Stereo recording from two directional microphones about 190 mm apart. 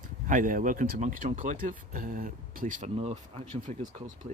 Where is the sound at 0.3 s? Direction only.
45° right (ahead or behind).